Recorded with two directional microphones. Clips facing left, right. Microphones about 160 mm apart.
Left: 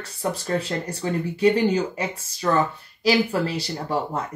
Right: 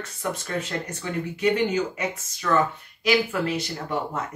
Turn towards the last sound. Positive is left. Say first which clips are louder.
# left 3 dB
turn(degrees=35)  # may be behind; listen again after turning